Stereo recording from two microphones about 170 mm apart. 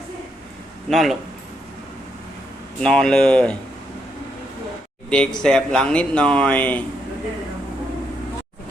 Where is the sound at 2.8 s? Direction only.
5° left (ahead or behind).